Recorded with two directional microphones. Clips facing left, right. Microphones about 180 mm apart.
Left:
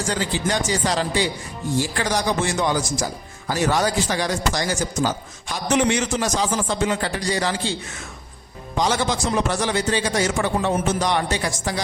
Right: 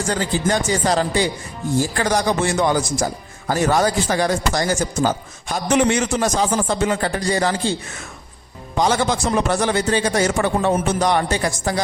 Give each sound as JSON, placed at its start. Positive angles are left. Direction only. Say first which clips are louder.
{"t": 0.1, "sound": "a man's voice", "louder": "right 4 dB", "side_deg": -45}
{"t": 8.8, "sound": "a man's voice", "louder": "right 3 dB", "side_deg": -50}